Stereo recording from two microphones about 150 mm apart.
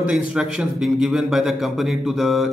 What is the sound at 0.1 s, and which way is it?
A man's voice, 5° right (ahead or behind).